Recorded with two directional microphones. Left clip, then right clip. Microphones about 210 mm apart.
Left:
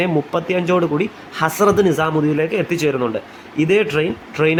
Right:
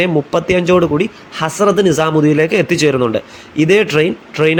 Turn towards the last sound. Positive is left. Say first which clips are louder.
# right 4 dB
turn(degrees=-15)  # may be behind; listen again after turning